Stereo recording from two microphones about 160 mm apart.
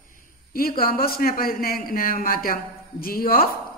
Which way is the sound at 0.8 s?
65° left (ahead or behind).